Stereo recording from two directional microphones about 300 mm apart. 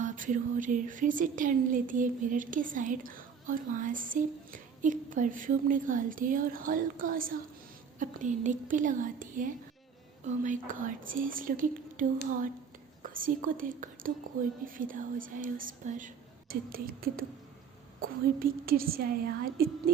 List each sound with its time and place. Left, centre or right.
0.0 s speech: right